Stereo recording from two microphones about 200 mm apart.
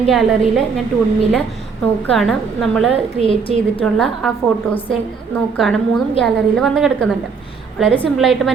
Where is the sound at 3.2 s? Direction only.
25° left (ahead or behind).